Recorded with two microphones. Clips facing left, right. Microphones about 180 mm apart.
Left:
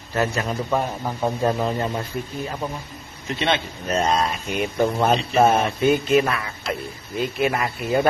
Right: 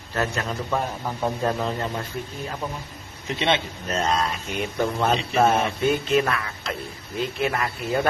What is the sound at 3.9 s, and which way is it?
A man's voice, 15° left (ahead or behind).